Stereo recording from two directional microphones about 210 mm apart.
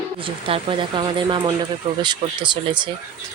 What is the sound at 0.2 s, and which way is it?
Speech, 25° right (ahead or behind).